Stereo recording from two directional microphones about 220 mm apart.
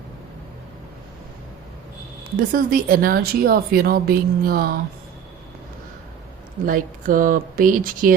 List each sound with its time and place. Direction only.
2.3 s speech: 40° right (ahead or behind)
6.7 s speech: 40° right (ahead or behind)